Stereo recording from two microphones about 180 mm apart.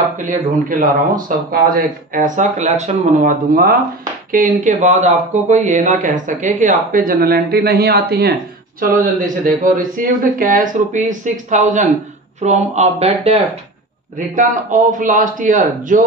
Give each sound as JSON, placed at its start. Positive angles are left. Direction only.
{"t": 0.2, "sound": "speech", "side_deg": -45}
{"t": 3.2, "sound": "speech", "side_deg": -50}
{"t": 9.2, "sound": "speech", "side_deg": -45}
{"t": 14.1, "sound": "speech", "side_deg": -45}